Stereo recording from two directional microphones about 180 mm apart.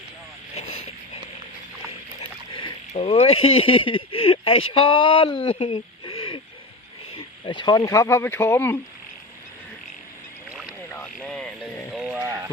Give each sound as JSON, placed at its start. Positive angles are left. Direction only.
{"t": 0.5, "sound": "boat", "side_deg": 35}
{"t": 2.5, "sound": "rowboat", "side_deg": 30}
{"t": 2.9, "sound": "speech", "side_deg": 35}
{"t": 10.7, "sound": "boat", "side_deg": 10}
{"t": 11.9, "sound": "sheep", "side_deg": -10}